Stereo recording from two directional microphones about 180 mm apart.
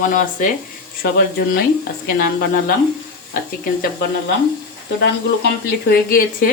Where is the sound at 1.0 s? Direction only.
60° left (ahead or behind).